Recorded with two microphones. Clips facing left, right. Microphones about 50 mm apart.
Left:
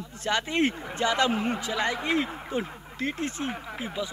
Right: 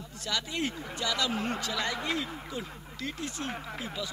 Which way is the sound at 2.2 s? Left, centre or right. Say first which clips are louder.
Left 7 dB; left.